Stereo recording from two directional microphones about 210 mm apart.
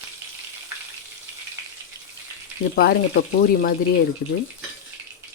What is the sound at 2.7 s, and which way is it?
Speech, 45° left (ahead or behind).